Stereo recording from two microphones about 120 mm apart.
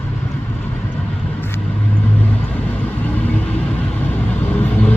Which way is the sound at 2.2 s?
15° left (ahead or behind).